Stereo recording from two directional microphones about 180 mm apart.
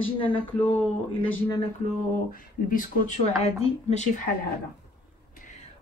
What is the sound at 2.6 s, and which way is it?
Speech, 50° left (ahead or behind).